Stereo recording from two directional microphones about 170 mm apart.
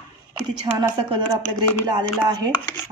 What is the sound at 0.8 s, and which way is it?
Speech, 30° right (ahead or behind).